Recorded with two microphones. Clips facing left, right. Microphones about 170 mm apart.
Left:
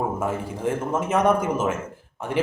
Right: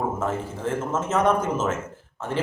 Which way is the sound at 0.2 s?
10° left (ahead or behind).